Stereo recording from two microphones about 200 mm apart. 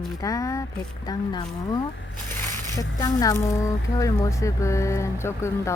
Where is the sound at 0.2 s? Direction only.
15° left (ahead or behind).